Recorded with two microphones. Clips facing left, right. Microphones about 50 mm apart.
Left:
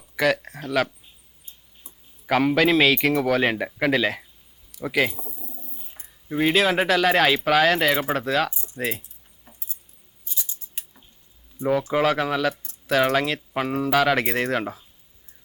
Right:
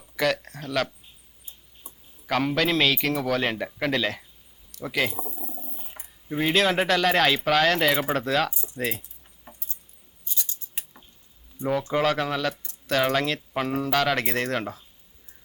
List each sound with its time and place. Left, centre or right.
0.2 s a man's voice: centre
2.2 s a man's voice: centre
5.1 s a sound: right
6.2 s speech: centre
9.5 s keys jangling: centre
11.6 s speech: centre